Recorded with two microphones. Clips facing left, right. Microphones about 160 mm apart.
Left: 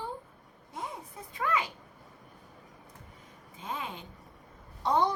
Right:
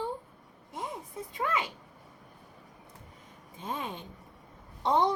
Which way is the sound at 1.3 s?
20° right (ahead or behind).